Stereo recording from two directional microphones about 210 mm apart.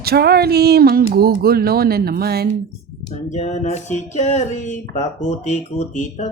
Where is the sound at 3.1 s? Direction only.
35° left (ahead or behind).